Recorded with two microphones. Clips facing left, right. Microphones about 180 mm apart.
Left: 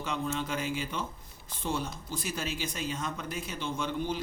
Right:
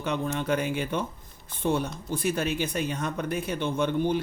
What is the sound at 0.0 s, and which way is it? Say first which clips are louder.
Speech: right 4 dB; 60° right (ahead or behind).